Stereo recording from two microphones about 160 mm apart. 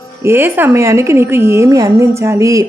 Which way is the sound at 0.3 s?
15° right (ahead or behind).